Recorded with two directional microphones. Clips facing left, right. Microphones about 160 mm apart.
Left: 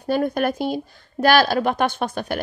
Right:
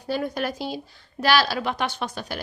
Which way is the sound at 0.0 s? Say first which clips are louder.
Left 6 dB; 55° left (ahead or behind).